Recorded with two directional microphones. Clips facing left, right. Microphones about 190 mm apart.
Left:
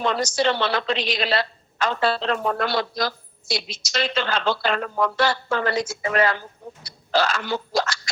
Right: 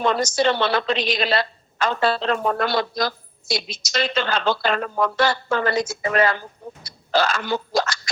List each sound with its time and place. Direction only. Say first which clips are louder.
0.0 s a woman's voice: right 2 dB; 45° right (ahead or behind)